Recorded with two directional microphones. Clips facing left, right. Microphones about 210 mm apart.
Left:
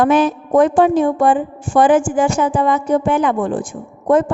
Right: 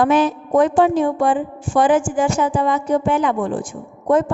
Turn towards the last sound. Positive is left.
turn(degrees=50)  # may be behind; listen again after turning